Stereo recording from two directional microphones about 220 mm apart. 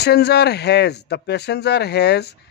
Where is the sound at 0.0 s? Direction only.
50° left (ahead or behind).